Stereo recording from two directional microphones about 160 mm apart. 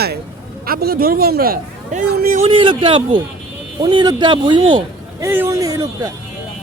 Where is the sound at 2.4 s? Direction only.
35° right (ahead or behind).